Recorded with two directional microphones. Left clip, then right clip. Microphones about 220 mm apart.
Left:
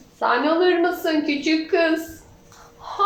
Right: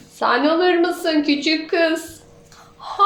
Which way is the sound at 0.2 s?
45° right (ahead or behind).